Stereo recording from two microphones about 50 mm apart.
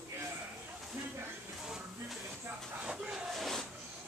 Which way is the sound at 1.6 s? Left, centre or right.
Centre.